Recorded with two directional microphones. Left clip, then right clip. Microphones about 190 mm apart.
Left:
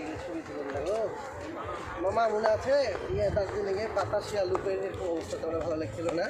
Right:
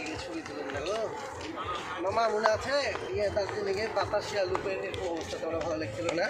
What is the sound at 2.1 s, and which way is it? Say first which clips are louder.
Speech: even; 50° left (ahead or behind).